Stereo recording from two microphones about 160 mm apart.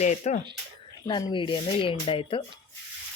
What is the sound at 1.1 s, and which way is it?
Speech, 25° left (ahead or behind).